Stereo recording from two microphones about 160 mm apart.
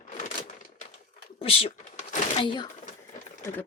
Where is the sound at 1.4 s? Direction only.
35° left (ahead or behind).